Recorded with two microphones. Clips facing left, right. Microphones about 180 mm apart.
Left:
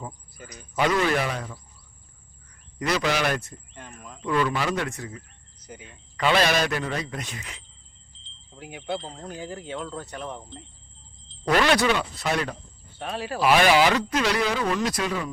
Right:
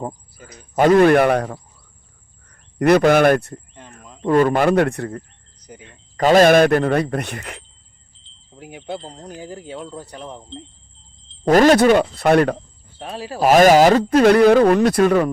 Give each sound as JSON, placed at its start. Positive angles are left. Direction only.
{"t": 0.3, "sound": "speech", "side_deg": -25}
{"t": 0.8, "sound": "speech", "side_deg": -50}
{"t": 2.7, "sound": "speech", "side_deg": -55}
{"t": 4.2, "sound": "speech", "side_deg": -45}
{"t": 5.9, "sound": "speech", "side_deg": -45}
{"t": 9.8, "sound": "speech", "side_deg": -30}
{"t": 11.4, "sound": "speech", "side_deg": -45}
{"t": 13.0, "sound": "speech", "side_deg": -30}
{"t": 14.1, "sound": "speech", "side_deg": -50}